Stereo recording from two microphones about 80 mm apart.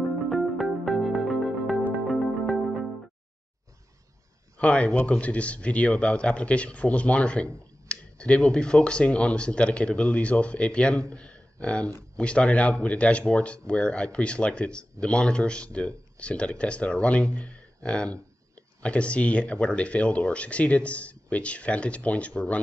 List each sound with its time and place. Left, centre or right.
0.3 s music: centre
4.6 s speech: centre